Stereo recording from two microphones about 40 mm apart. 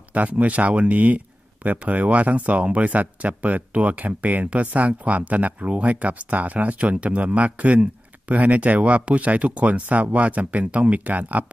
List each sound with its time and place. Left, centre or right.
0.1 s speech: right